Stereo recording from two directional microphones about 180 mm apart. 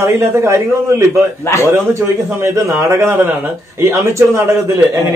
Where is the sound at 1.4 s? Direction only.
15° left (ahead or behind).